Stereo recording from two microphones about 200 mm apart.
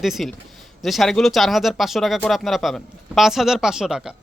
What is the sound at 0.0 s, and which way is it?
Speech, centre (ahead or behind).